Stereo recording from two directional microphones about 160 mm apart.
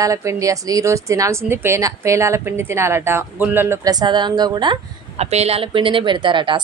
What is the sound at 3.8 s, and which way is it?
Speech, 25° right (ahead or behind).